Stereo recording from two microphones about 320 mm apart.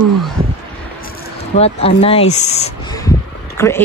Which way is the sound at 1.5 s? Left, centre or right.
Centre.